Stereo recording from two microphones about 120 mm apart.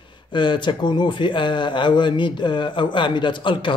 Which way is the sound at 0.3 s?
40° left (ahead or behind).